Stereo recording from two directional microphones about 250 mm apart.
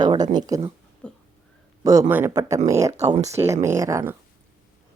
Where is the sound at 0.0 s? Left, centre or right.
Centre.